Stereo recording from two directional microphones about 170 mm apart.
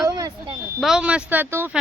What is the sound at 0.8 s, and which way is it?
Speech, 5° right (ahead or behind).